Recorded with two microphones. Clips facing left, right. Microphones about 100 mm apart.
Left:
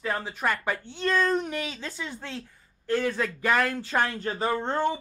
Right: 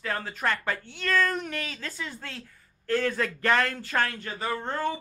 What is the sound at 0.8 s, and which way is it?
A woman's voice, 25° left (ahead or behind).